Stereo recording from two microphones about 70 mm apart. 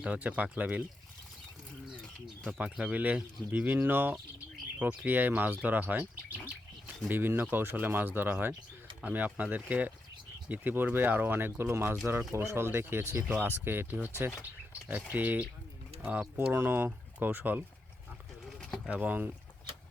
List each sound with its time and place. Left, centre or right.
0.0 s speech: right
2.5 s speech: centre
7.1 s speech: right
18.4 s pigeon: centre
18.9 s speech: right